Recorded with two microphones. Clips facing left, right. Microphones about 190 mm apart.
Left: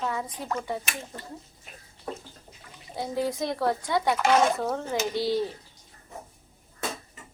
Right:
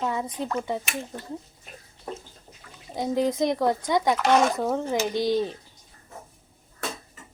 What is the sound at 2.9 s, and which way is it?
A child's voice, 20° right (ahead or behind).